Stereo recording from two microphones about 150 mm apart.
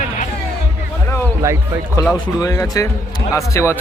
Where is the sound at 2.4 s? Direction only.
25° left (ahead or behind).